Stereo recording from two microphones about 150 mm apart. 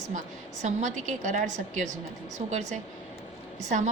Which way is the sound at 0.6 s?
55° right (ahead or behind).